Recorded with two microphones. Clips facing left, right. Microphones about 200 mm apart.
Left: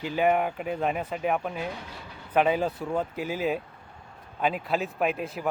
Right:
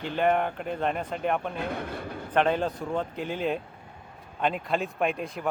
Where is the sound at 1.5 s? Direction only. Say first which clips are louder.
Right 3 dB; 55° right (ahead or behind).